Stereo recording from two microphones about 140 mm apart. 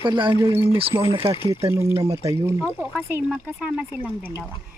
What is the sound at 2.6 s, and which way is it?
Speech, 5° right (ahead or behind).